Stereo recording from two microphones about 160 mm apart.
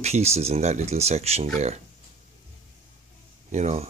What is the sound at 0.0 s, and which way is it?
Speech, 40° right (ahead or behind).